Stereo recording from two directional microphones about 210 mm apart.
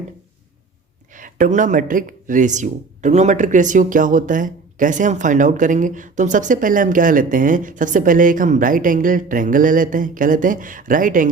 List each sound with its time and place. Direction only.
1.1 s speech: 40° right (ahead or behind)